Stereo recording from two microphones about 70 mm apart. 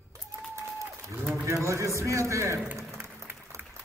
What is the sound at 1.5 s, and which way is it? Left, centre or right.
A man's voice, right.